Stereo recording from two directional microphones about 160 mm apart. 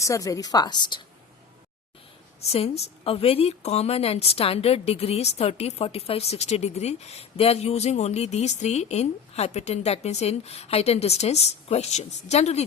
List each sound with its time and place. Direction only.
0.0 s a woman's voice: 20° left (ahead or behind)
2.5 s a woman's voice: 40° left (ahead or behind)